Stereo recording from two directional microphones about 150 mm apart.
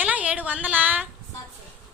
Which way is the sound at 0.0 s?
10° right (ahead or behind).